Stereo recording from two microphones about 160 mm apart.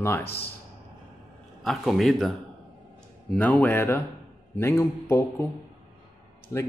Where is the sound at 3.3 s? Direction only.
10° left (ahead or behind).